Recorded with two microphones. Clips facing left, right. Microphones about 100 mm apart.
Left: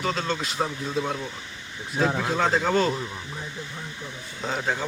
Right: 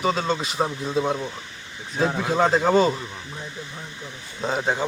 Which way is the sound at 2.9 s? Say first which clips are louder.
Left 2 dB; 5° left (ahead or behind).